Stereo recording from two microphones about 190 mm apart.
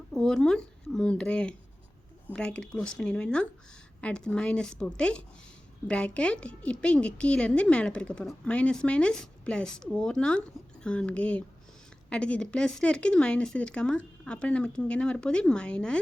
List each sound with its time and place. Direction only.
0.1 s a woman's voice: 5° left (ahead or behind)